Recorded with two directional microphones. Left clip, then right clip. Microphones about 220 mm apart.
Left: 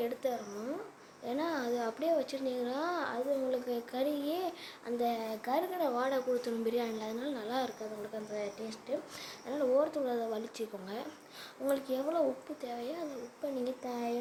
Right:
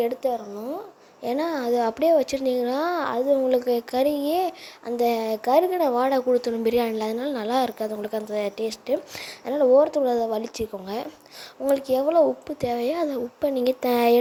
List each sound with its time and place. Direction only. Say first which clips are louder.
0.0 s speech: right 11 dB; 20° right (ahead or behind)
1.2 s a woman's voice: right 10 dB; 35° right (ahead or behind)
9.5 s a woman's voice: right 13 dB; 30° right (ahead or behind); by 14.2 s 45° right (ahead or behind)